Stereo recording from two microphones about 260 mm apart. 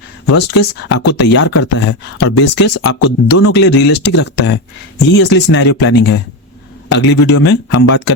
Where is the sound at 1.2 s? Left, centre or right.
Left.